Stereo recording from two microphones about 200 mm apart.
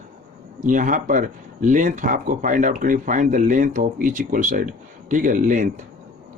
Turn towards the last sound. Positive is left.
turn(degrees=-40)  # may be behind; listen again after turning